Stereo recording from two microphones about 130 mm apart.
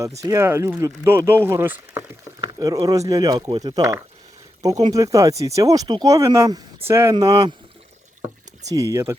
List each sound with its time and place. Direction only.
0.2 s speech: 20° right (ahead or behind)
2.4 s speech: 30° right (ahead or behind)
7.1 s speech: 30° right (ahead or behind)
8.6 s speech: 25° right (ahead or behind)